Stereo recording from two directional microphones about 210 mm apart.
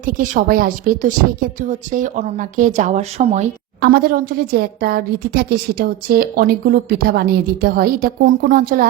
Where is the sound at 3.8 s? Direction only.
45° right (ahead or behind).